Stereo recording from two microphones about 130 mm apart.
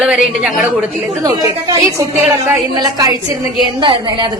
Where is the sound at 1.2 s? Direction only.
30° right (ahead or behind).